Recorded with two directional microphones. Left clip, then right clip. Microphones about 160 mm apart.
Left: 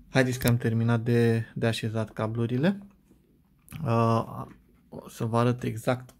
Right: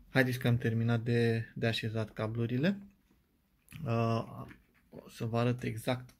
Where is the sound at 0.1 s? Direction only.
10° left (ahead or behind).